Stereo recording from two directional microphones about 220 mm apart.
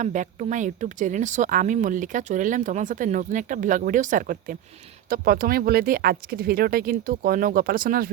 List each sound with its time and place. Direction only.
0.0 s speech: 35° right (ahead or behind)